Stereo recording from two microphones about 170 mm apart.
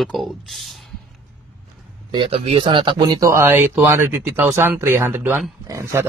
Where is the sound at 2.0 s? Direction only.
30° right (ahead or behind).